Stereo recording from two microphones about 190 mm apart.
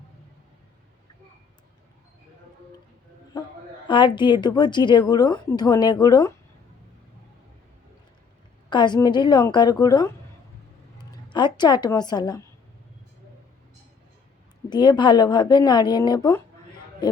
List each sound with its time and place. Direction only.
3.8 s a woman's voice: 25° left (ahead or behind)
8.7 s a woman's voice: 25° left (ahead or behind)
14.7 s a woman's voice: 25° left (ahead or behind)